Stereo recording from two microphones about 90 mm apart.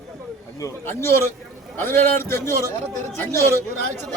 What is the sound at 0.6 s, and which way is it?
A man's voice, 35° left (ahead or behind).